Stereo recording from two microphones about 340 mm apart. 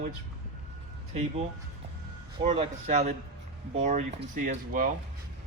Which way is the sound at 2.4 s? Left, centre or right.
Centre.